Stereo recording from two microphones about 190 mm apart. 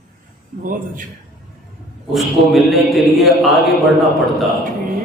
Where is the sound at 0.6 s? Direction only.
45° right (ahead or behind).